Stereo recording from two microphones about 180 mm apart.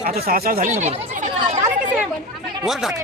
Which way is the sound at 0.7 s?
35° right (ahead or behind).